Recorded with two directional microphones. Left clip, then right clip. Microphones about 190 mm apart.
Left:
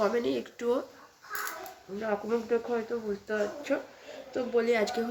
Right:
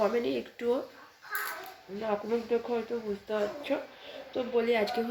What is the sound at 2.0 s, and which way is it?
Speech, 10° right (ahead or behind).